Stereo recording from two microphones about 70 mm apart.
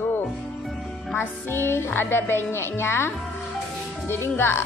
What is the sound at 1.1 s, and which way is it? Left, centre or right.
A woman's voice, left.